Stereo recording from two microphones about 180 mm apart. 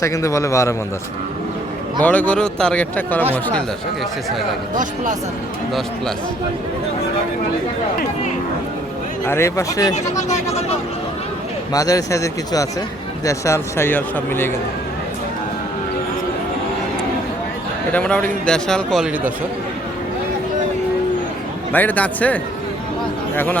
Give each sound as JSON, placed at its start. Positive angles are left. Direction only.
{"t": 0.0, "sound": "speech", "side_deg": 15}
{"t": 2.0, "sound": "speech", "side_deg": 10}
{"t": 9.2, "sound": "speech", "side_deg": 15}
{"t": 9.9, "sound": "speech", "side_deg": 40}
{"t": 11.7, "sound": "speech", "side_deg": 20}
{"t": 17.9, "sound": "speech", "side_deg": 5}
{"t": 21.7, "sound": "speech", "side_deg": 10}